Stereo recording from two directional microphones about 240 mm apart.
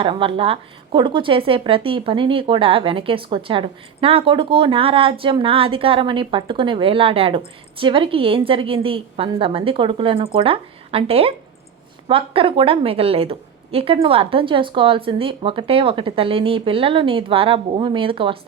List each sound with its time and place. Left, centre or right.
0.0 s speech: right